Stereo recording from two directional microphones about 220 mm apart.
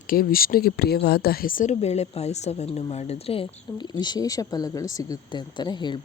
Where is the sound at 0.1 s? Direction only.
40° left (ahead or behind).